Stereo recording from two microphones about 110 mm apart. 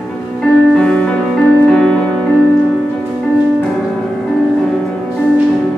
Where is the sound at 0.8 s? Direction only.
10° left (ahead or behind).